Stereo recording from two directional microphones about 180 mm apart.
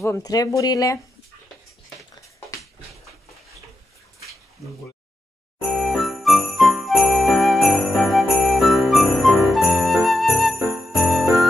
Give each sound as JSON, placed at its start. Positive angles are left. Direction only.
{"t": 0.0, "sound": "speech", "side_deg": 20}
{"t": 5.6, "sound": "jingle bell", "side_deg": 0}